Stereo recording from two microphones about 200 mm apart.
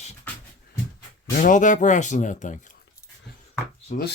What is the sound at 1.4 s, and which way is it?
Speech, 40° left (ahead or behind).